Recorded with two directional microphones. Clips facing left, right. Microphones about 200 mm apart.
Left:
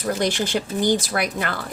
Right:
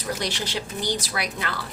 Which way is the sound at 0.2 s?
50° left (ahead or behind).